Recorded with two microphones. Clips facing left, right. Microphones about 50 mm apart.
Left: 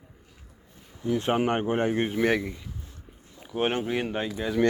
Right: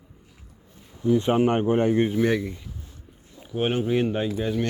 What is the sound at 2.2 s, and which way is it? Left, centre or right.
Speech, left.